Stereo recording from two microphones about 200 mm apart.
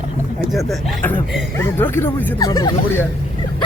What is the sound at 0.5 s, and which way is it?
Speech, 5° left (ahead or behind).